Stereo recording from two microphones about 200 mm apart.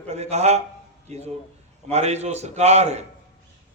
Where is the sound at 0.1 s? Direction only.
35° right (ahead or behind).